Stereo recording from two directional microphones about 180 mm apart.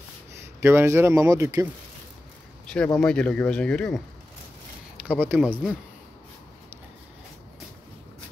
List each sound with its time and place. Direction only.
0.6 s speech: 15° right (ahead or behind)
2.6 s a sound: 5° left (ahead or behind)
2.9 s speech: 5° left (ahead or behind)
4.9 s speech: 5° right (ahead or behind)